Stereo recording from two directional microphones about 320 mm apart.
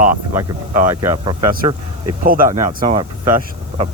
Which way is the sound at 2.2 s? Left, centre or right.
Right.